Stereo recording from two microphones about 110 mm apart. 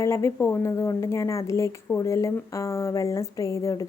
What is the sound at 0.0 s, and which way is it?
A woman's voice, 25° left (ahead or behind).